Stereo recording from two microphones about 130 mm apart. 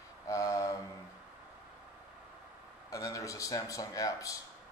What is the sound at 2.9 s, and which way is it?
Mantra, 25° left (ahead or behind).